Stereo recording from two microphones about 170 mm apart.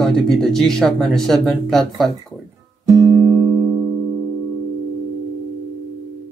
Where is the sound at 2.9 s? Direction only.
20° right (ahead or behind).